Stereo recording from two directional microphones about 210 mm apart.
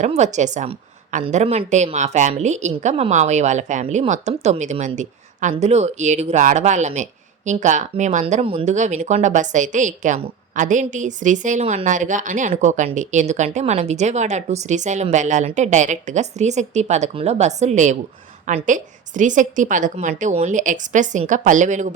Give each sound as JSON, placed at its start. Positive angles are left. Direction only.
{"t": 0.0, "sound": "a woman's voice", "side_deg": -35}